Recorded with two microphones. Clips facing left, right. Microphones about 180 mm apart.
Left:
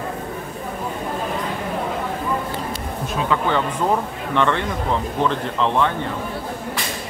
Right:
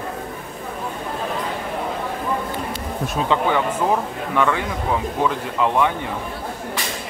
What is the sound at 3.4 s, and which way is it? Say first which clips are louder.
Speech: right 1 dB; 10° right (ahead or behind).